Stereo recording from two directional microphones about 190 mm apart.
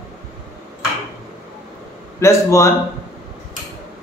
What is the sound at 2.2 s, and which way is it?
Speech, 15° left (ahead or behind).